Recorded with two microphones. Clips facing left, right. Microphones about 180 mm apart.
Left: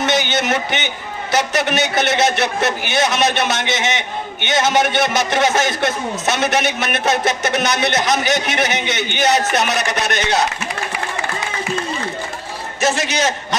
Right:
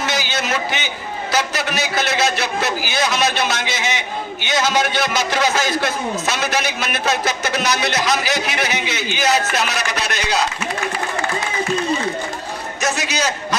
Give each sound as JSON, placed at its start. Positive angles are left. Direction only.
{"t": 0.0, "sound": "a man's voice", "side_deg": 20}
{"t": 12.8, "sound": "a man's voice", "side_deg": 20}